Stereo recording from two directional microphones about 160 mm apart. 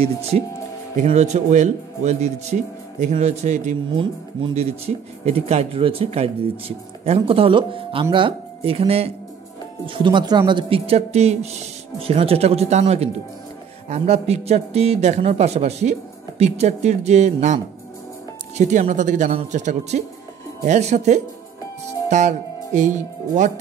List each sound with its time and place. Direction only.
0.0 s a man's voice: 40° right (ahead or behind)
3.9 s speech: 30° right (ahead or behind)
4.6 s a man's voice: 40° right (ahead or behind)
18.6 s a man's voice: 45° right (ahead or behind)